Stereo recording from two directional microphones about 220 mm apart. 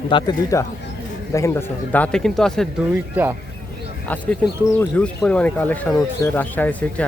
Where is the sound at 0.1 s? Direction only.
20° left (ahead or behind); by 3.0 s centre (ahead or behind).